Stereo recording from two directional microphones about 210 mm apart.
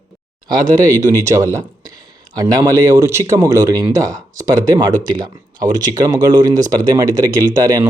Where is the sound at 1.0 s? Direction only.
15° right (ahead or behind).